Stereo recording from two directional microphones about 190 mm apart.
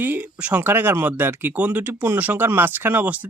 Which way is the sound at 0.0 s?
10° right (ahead or behind).